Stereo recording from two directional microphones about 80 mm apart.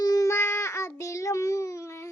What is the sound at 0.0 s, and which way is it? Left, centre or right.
Child singing, left.